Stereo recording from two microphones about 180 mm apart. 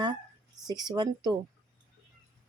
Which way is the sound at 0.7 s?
25° right (ahead or behind).